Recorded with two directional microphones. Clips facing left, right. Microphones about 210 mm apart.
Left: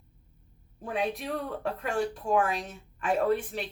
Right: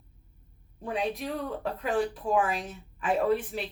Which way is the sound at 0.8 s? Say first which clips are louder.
Even; centre (ahead or behind).